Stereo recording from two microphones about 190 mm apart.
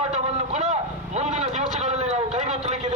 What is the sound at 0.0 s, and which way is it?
Vehicle, 35° right (ahead or behind).